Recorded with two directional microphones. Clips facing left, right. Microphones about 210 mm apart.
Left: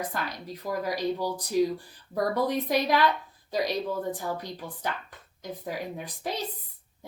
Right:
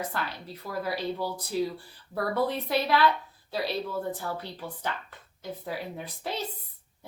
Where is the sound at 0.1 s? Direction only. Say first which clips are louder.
Left 1 dB; 15° left (ahead or behind).